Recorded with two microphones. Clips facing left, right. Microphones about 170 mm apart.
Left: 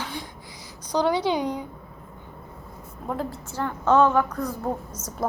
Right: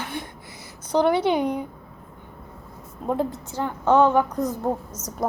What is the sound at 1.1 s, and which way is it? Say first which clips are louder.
Speech: right 3 dB; 55° right (ahead or behind).